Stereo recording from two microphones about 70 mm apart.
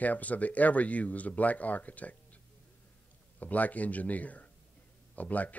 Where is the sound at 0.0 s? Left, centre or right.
Left.